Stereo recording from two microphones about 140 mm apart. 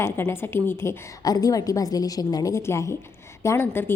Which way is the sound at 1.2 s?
25° left (ahead or behind).